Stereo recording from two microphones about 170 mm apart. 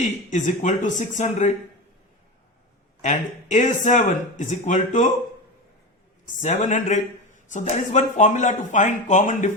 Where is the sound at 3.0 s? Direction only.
45° left (ahead or behind).